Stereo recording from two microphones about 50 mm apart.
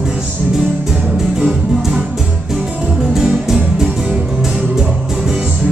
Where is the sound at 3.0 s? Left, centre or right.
Centre.